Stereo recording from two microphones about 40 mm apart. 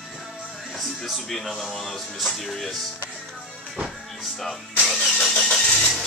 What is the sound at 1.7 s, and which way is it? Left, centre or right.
Music, centre.